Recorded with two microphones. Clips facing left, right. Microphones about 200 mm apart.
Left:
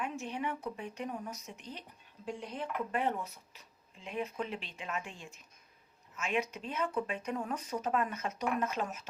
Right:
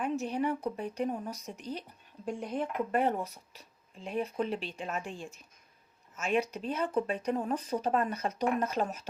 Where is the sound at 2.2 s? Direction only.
50° right (ahead or behind).